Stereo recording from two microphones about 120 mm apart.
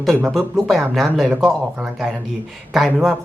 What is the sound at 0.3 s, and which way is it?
Speech, centre (ahead or behind).